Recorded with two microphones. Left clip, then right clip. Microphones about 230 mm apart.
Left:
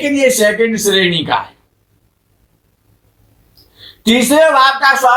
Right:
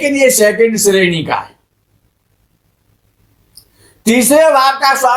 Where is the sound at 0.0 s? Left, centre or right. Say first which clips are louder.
Right 2 dB; right.